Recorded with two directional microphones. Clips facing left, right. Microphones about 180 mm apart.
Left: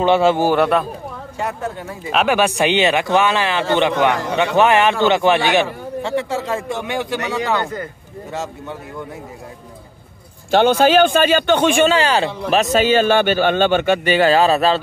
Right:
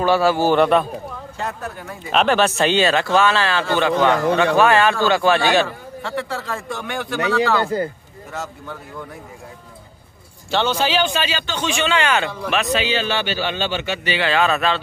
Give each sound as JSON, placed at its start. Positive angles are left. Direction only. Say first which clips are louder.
{"t": 0.0, "sound": "a man's voice", "louder": "left 2 dB", "side_deg": 20}
{"t": 0.5, "sound": "a man's voice", "louder": "even", "side_deg": 0}
{"t": 1.4, "sound": "a man's voice", "louder": "left 4 dB", "side_deg": 25}
{"t": 2.1, "sound": "a man's voice", "louder": "even", "side_deg": 10}
{"t": 7.6, "sound": "speech", "louder": "right 5 dB", "side_deg": -35}
{"t": 8.3, "sound": "a man's voice", "louder": "left 3 dB", "side_deg": 25}
{"t": 10.5, "sound": "a man's voice", "louder": "left 7 dB", "side_deg": 55}
{"t": 11.9, "sound": "a man's voice", "louder": "left 3 dB", "side_deg": 35}